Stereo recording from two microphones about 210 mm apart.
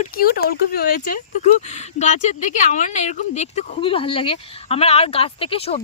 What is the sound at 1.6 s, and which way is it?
Speech, 35° left (ahead or behind).